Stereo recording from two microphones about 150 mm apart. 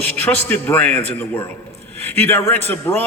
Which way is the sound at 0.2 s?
10° left (ahead or behind).